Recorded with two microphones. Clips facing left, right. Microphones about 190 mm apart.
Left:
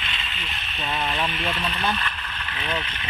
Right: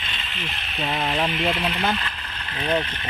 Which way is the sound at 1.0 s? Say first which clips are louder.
Right 3 dB; 30° right (ahead or behind).